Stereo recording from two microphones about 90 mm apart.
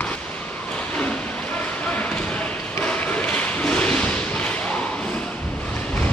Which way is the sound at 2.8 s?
15° left (ahead or behind).